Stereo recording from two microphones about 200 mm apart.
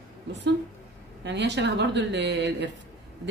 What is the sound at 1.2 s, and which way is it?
A woman's voice, 60° right (ahead or behind).